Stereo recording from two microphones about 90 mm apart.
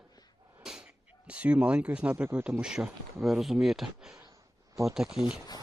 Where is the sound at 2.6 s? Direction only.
10° right (ahead or behind).